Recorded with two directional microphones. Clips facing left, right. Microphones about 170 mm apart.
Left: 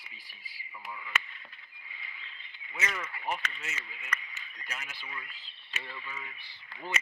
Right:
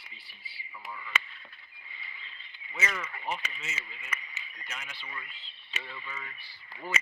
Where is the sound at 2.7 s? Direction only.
Centre (ahead or behind).